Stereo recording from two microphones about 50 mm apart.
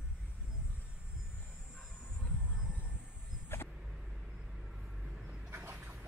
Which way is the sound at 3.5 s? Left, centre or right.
Left.